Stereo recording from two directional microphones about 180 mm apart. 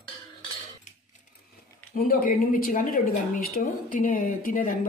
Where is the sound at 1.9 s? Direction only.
55° left (ahead or behind).